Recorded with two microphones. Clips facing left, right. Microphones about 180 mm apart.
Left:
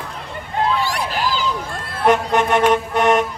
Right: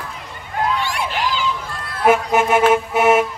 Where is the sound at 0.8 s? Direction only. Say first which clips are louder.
Left 1 dB; 40° left (ahead or behind).